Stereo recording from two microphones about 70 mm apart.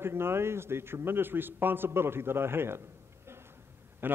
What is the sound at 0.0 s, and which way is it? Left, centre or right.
A man's voice, right.